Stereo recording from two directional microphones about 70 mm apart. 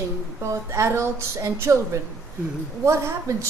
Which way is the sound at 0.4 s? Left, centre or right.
Right.